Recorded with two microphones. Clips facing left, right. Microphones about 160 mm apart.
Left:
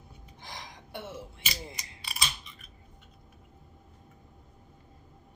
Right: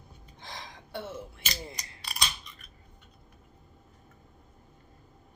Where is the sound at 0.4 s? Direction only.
20° left (ahead or behind).